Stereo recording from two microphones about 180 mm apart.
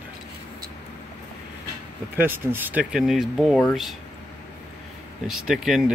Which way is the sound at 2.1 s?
10° right (ahead or behind).